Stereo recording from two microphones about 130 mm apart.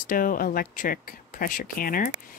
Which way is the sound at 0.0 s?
90° left.